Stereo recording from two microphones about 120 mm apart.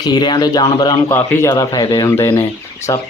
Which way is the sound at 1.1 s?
25° left (ahead or behind).